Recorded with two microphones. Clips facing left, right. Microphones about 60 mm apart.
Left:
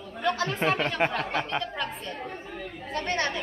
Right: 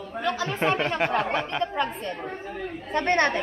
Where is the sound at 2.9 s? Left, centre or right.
Right.